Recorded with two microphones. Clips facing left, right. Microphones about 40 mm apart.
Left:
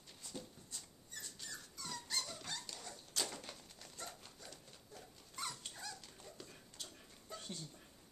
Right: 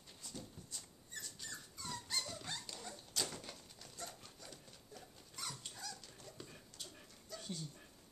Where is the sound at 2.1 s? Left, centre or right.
Centre.